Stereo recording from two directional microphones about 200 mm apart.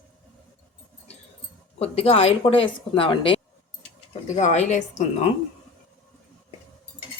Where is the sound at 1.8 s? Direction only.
30° left (ahead or behind).